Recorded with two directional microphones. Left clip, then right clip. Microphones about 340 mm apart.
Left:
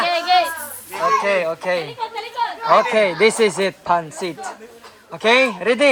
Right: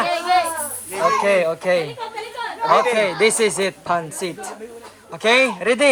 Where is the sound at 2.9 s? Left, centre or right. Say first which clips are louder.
Left 2 dB; centre.